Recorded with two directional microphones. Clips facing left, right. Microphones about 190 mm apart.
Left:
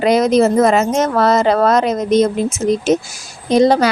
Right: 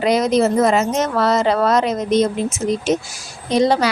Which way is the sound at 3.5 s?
45° left (ahead or behind).